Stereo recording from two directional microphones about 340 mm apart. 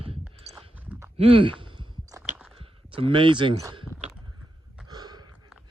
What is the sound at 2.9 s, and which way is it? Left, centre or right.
Speech, centre.